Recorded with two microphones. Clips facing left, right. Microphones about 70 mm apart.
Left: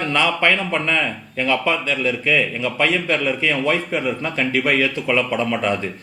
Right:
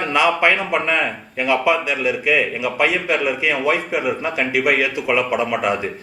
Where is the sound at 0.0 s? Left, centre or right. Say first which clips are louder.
Right 2 dB; centre.